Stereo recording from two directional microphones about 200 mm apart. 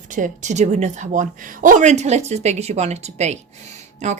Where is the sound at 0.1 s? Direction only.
40° right (ahead or behind).